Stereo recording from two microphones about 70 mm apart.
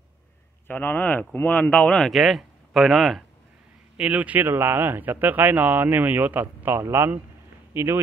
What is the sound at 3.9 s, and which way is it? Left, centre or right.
Speech, centre.